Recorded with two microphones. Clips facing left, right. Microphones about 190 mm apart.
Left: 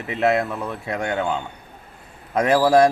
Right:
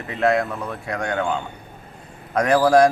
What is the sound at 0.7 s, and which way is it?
Speech, 20° left (ahead or behind).